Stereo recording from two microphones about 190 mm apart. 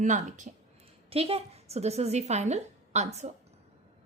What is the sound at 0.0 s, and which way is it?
Speech, 40° right (ahead or behind).